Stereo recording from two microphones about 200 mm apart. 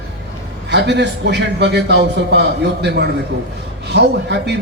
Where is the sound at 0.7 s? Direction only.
60° right (ahead or behind).